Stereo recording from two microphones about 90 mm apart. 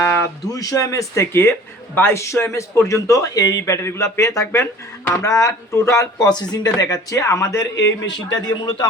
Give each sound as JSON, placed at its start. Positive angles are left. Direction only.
{"t": 0.5, "sound": "speech", "side_deg": 40}